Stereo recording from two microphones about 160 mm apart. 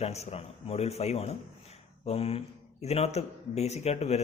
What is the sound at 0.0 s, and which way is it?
Speech, 40° left (ahead or behind).